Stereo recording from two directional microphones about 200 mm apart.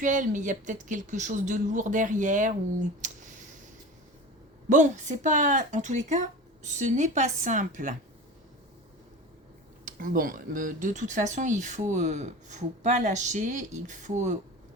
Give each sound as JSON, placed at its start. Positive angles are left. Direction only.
{"t": 0.0, "sound": "speech", "side_deg": -40}
{"t": 4.7, "sound": "speech", "side_deg": -35}
{"t": 9.8, "sound": "speech", "side_deg": -40}